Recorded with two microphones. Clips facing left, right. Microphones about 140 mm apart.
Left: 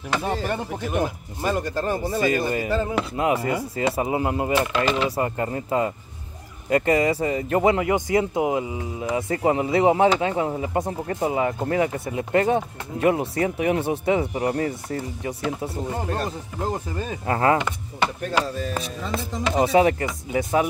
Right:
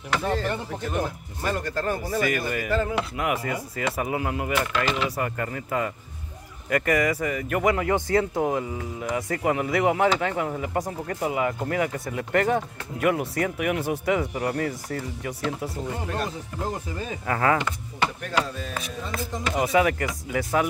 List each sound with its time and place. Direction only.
1.4 s speech: 20° left (ahead or behind)
17.3 s speech: 30° left (ahead or behind)
19.1 s speech: 25° left (ahead or behind)